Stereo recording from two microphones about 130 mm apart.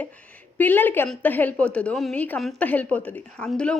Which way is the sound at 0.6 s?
15° left (ahead or behind).